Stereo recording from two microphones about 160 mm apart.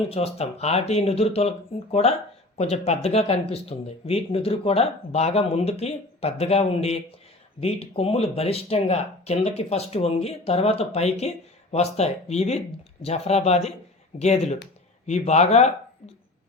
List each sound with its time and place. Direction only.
0.1 s speech: 40° left (ahead or behind)